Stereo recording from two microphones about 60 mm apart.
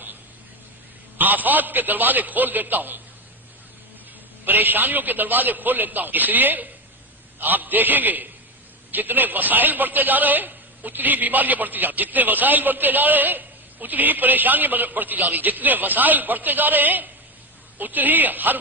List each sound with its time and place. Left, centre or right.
1.2 s a man's voice: right
4.4 s a man's voice: right